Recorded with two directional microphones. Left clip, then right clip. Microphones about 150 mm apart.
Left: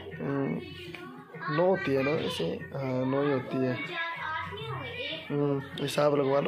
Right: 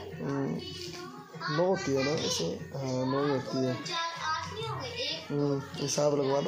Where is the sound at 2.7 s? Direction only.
Centre (ahead or behind).